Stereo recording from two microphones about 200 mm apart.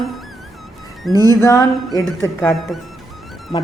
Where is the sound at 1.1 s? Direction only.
20° right (ahead or behind).